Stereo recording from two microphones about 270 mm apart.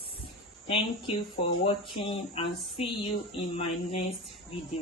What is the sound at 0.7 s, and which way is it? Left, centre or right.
Female singing, left.